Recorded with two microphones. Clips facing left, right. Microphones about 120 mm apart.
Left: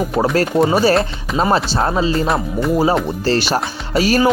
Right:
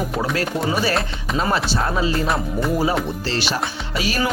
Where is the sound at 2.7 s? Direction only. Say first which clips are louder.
Left 7 dB; 35° left (ahead or behind).